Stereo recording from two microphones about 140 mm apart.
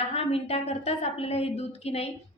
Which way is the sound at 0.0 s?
45° left (ahead or behind).